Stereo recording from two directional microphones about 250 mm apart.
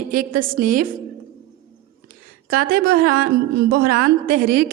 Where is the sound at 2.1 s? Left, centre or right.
Right.